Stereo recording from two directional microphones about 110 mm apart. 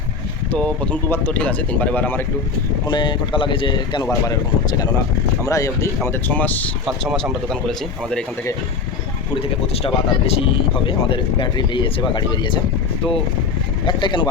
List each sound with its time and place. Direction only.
0.5 s speech: 10° left (ahead or behind)
2.8 s speech: 45° left (ahead or behind)
4.0 s speech: 35° left (ahead or behind)
6.2 s speech: 15° left (ahead or behind)
6.8 s speech: centre (ahead or behind)
9.3 s speech: 60° left (ahead or behind)
13.8 s speech: 45° left (ahead or behind)